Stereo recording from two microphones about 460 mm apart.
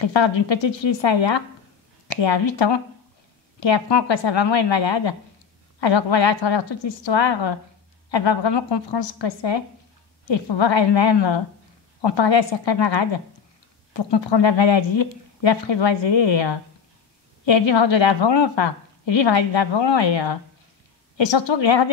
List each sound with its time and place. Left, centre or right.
0.0 s a woman's voice: left